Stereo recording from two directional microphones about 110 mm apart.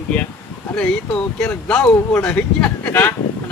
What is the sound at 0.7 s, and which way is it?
Speech, 10° left (ahead or behind).